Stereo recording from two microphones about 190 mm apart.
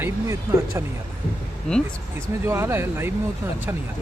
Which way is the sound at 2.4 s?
15° right (ahead or behind).